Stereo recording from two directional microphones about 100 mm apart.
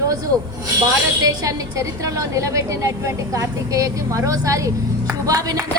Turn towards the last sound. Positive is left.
turn(degrees=-35)  # may be behind; listen again after turning